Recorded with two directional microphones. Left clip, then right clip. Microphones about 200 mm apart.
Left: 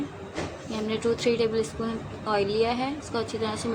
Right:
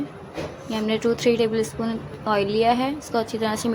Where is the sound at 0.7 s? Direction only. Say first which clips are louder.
Right 5 dB; 25° right (ahead or behind).